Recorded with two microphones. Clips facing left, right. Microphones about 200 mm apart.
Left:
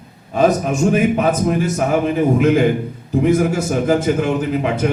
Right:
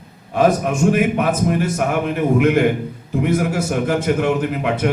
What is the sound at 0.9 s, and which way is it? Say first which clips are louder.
Speech: left 3 dB; 60° right (ahead or behind).